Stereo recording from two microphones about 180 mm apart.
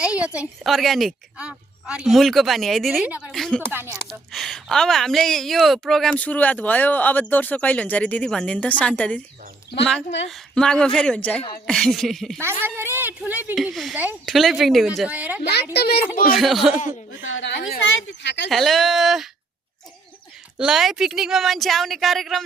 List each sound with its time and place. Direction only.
0.0 s a woman's voice: 5° right (ahead or behind)
3.7 s a woman's voice: 10° right (ahead or behind)
4.3 s a woman's voice: centre (ahead or behind)
10.2 s a woman's voice: centre (ahead or behind)
12.6 s a woman's voice: 15° right (ahead or behind)
13.6 s a woman's voice: centre (ahead or behind)
15.7 s a child's voice: 65° left (ahead or behind)
16.3 s a woman's voice: centre (ahead or behind)
17.2 s a woman's voice: 85° left
17.6 s speech: 65° left (ahead or behind)
18.5 s a woman's voice: centre (ahead or behind)
20.6 s a woman's voice: 5° right (ahead or behind)